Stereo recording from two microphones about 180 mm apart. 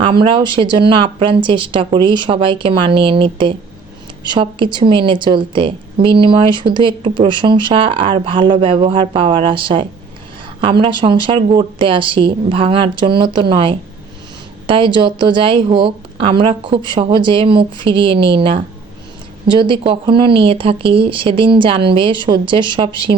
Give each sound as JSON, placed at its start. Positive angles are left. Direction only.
{"t": 0.0, "sound": "a woman's voice", "side_deg": -30}